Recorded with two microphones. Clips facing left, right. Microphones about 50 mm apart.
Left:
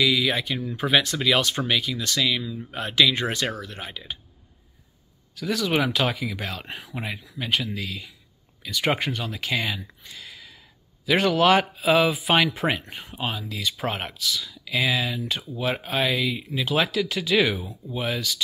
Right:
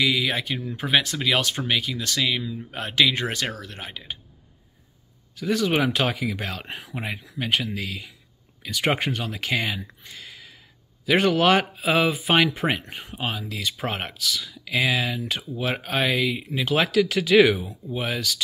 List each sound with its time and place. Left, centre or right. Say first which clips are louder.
0.0 s speech: left 1 dB; right
2.3 s speech: even; centre
2.7 s speech: left 1 dB; right
5.4 s speech: right 2 dB; right
6.7 s speech: right 1 dB; right
13.8 s speech: even; right
14.2 s speech: even; right